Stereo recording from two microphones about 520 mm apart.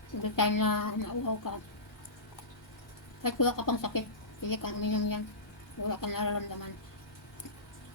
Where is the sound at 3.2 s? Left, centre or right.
Left.